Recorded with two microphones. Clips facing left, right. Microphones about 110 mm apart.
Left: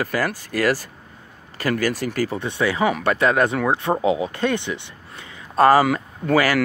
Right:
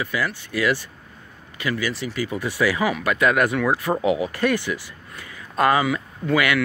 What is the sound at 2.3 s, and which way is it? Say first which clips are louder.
Speech: even; 25° left (ahead or behind).